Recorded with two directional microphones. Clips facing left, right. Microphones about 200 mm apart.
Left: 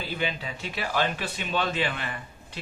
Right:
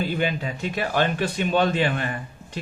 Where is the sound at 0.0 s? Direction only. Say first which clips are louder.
Right 6 dB; 50° right (ahead or behind).